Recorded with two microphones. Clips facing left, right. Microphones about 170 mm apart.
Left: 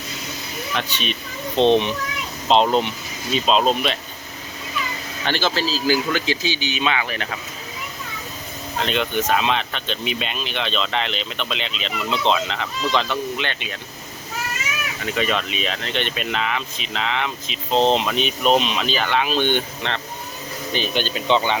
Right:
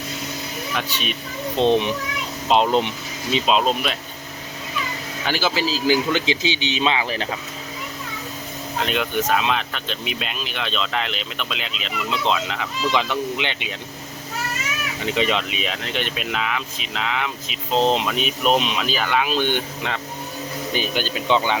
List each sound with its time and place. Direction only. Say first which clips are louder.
0.8 s speech: left 1 dB; 10° right (ahead or behind)
1.5 s a child's voice: left 2 dB; 25° left (ahead or behind)
2.5 s speech: left 1 dB; 10° right (ahead or behind)
3.6 s speech: left 2 dB; centre (ahead or behind)
5.2 s speech: even; 10° right (ahead or behind); by 7.3 s 30° right (ahead or behind)
8.8 s speech: left 1 dB; 5° right (ahead or behind)
15.0 s speech: right 1 dB; 20° right (ahead or behind)